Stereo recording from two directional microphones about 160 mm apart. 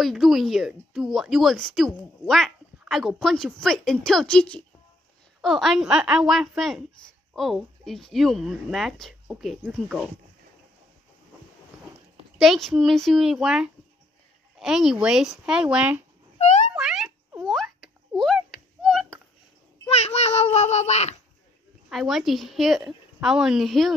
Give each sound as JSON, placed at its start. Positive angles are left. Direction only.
{"t": 0.0, "sound": "speech", "side_deg": 0}
{"t": 12.4, "sound": "speech", "side_deg": 0}
{"t": 16.7, "sound": "a sound", "side_deg": -5}
{"t": 19.9, "sound": "a sound", "side_deg": 40}
{"t": 20.5, "sound": "speech", "side_deg": 45}
{"t": 21.8, "sound": "speech", "side_deg": 0}